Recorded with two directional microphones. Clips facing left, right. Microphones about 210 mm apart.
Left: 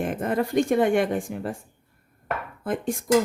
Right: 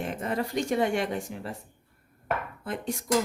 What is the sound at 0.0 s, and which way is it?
Speech, 50° left (ahead or behind).